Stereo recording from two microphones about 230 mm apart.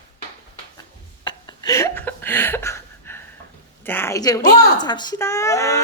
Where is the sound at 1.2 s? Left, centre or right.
Centre.